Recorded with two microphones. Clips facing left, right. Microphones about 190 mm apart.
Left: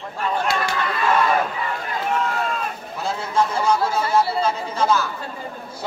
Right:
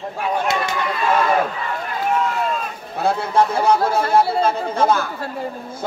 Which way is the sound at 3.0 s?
60° right (ahead or behind).